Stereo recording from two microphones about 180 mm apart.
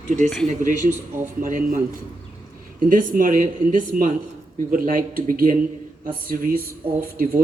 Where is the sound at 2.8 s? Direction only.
50° right (ahead or behind).